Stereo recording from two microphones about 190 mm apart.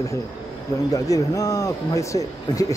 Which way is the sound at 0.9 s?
15° left (ahead or behind).